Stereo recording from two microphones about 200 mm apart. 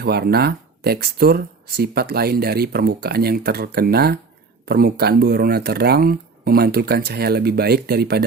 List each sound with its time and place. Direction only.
0.0 s speech: 50° right (ahead or behind)